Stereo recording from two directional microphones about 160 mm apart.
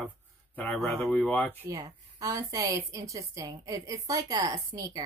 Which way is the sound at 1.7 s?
20° right (ahead or behind).